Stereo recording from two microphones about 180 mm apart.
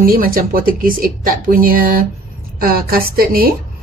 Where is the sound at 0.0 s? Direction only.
50° right (ahead or behind).